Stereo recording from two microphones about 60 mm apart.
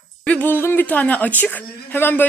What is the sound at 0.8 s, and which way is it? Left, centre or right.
A woman's voice, left.